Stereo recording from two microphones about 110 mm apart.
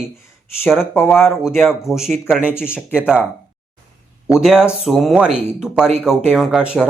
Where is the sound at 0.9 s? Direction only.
25° left (ahead or behind).